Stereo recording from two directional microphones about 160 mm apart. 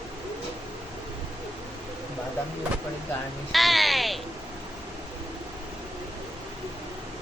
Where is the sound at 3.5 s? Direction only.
Centre (ahead or behind).